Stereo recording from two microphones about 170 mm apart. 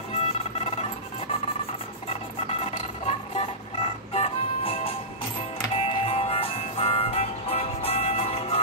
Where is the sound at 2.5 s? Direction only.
35° left (ahead or behind).